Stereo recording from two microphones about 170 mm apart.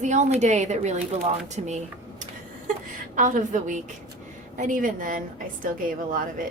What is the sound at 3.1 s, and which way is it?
A woman's voice, 50° right (ahead or behind).